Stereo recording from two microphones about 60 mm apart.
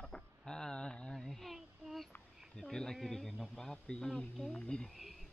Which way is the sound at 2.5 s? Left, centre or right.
Centre.